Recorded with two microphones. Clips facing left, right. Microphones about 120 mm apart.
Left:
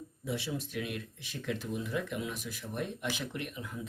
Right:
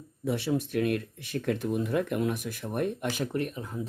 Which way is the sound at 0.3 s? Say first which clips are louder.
Right 8 dB; 55° right (ahead or behind).